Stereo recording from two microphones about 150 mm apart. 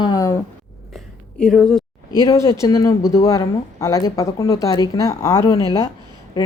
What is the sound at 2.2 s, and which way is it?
Speech, 20° left (ahead or behind).